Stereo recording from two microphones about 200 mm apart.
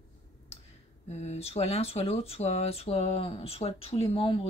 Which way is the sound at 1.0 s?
35° left (ahead or behind).